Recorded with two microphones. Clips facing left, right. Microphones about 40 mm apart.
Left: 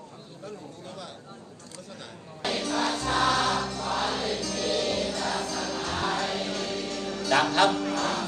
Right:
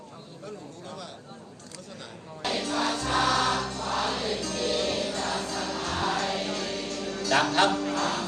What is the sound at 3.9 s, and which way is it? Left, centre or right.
Music, left.